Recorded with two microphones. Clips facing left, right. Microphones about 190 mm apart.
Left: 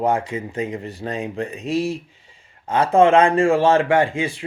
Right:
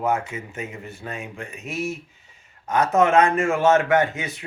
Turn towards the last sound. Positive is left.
turn(degrees=30)  # may be behind; listen again after turning